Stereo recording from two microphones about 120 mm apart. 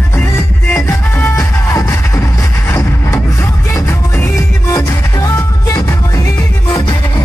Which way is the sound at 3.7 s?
30° left (ahead or behind).